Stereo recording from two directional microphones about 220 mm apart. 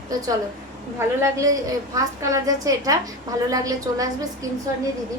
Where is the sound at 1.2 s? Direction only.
15° right (ahead or behind).